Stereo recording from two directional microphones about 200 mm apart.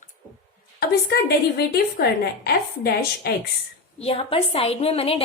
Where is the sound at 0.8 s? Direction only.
50° left (ahead or behind).